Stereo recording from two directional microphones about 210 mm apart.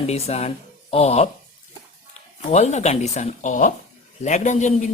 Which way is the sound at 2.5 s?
30° left (ahead or behind).